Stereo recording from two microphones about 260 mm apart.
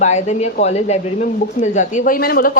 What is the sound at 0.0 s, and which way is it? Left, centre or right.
Speech, left.